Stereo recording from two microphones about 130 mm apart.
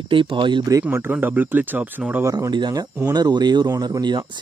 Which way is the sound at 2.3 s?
30° right (ahead or behind).